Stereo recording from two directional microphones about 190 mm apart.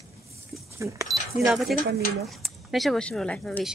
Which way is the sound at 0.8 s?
15° right (ahead or behind).